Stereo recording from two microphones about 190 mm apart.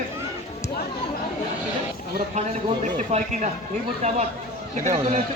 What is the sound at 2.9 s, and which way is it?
Speech, 40° right (ahead or behind).